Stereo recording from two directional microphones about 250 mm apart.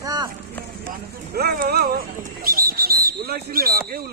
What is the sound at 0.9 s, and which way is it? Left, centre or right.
Bird, right.